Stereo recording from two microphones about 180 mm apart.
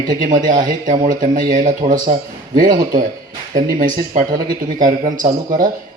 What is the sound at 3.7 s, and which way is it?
A man's voice, 50° right (ahead or behind).